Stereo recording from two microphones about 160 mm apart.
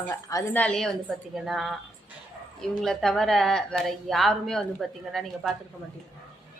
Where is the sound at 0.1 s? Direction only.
20° left (ahead or behind).